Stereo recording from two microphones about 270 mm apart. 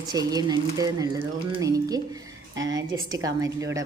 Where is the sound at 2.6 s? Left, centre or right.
Right.